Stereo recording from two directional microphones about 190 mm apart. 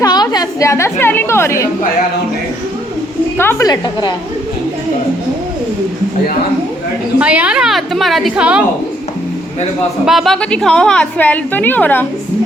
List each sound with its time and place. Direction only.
0.0 s a woman's voice: 20° left (ahead or behind)
3.3 s a woman's voice: 10° left (ahead or behind)
7.2 s a woman's voice: 5° right (ahead or behind)
10.1 s a woman's voice: centre (ahead or behind)